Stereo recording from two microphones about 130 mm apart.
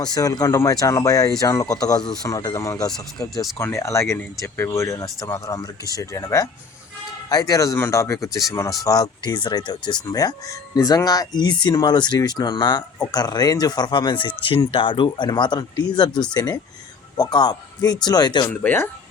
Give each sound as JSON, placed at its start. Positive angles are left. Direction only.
{"t": 0.0, "sound": "speech", "side_deg": 30}
{"t": 2.7, "sound": "speech", "side_deg": 5}
{"t": 3.6, "sound": "a man's voice", "side_deg": 20}
{"t": 18.6, "sound": "speech", "side_deg": 15}